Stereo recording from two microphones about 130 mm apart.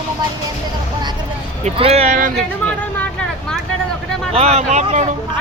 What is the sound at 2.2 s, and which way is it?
Speech, 90° right.